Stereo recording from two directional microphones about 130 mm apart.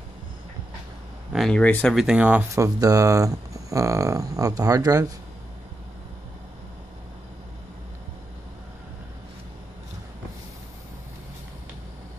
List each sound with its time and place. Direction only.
1.3 s speech: centre (ahead or behind)
2.0 s speech: 5° right (ahead or behind)
2.5 s speech: 25° right (ahead or behind)